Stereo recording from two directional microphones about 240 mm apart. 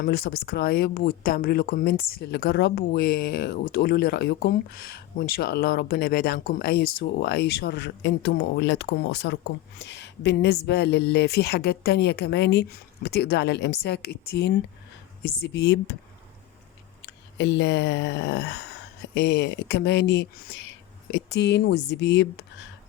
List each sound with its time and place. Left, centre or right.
0.0 s a woman's voice: left
17.3 s speech: left